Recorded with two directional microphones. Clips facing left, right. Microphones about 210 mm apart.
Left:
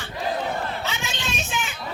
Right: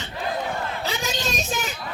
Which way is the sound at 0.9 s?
35° right (ahead or behind).